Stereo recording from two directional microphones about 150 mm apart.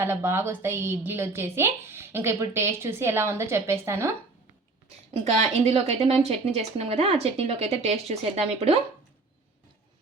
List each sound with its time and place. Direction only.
0.0 s a woman's voice: 15° right (ahead or behind)
5.1 s speech: 45° right (ahead or behind)